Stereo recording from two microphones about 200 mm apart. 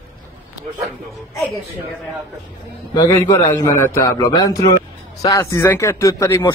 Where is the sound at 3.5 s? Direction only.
15° left (ahead or behind).